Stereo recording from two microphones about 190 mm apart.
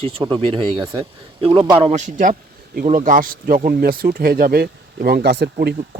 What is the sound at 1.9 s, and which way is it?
Speech, 40° right (ahead or behind).